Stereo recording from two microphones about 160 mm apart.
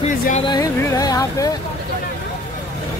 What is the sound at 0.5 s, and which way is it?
Music, 25° left (ahead or behind).